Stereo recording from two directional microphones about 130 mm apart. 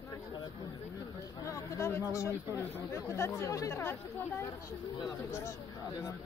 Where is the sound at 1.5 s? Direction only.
20° left (ahead or behind).